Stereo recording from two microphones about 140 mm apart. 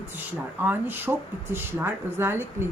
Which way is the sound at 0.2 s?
15° right (ahead or behind).